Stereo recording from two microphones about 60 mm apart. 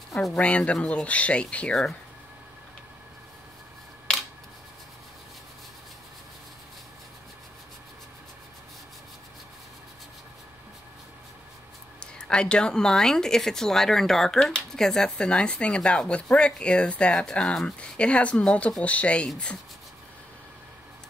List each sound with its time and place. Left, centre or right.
0.4 s speech: left
12.0 s speech: centre